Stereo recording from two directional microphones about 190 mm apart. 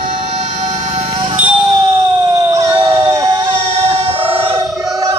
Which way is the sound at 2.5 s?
15° right (ahead or behind).